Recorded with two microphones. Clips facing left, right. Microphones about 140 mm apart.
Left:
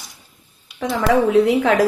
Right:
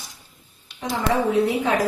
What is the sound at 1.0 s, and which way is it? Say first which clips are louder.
Speech: left 5 dB; 90° left.